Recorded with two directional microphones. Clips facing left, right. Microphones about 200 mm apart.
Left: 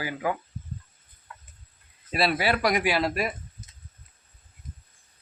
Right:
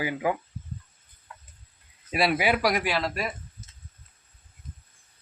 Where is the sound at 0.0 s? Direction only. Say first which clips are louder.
Right 2 dB; 15° right (ahead or behind).